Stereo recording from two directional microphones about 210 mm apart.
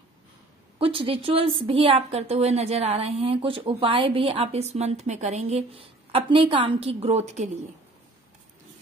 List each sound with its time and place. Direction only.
0.7 s a woman's voice: 25° right (ahead or behind)